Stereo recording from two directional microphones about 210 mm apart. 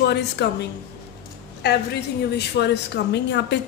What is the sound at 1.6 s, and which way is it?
A woman's voice, 50° left (ahead or behind).